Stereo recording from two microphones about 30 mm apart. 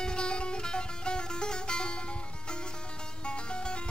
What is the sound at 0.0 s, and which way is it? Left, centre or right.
Music, left.